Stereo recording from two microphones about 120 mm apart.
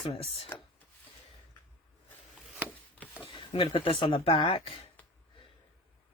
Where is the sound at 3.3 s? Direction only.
45° left (ahead or behind).